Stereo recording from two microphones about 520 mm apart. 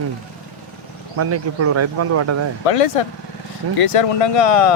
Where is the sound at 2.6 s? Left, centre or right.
Left.